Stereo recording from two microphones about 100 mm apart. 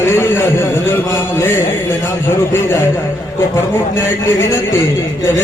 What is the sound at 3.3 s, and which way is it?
Speech, 25° left (ahead or behind).